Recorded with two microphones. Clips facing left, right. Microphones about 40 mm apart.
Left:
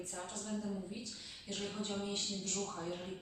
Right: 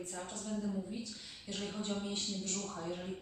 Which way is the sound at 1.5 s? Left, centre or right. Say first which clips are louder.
Right 1 dB; centre.